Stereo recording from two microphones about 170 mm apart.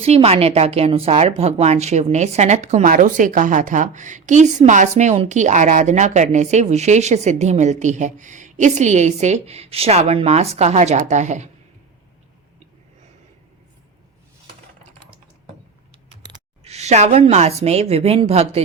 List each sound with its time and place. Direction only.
0.0 s a woman's voice: 35° right (ahead or behind)
16.6 s a woman's voice: 40° right (ahead or behind)